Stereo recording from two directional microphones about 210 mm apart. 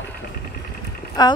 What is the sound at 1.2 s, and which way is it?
Speech, 20° left (ahead or behind).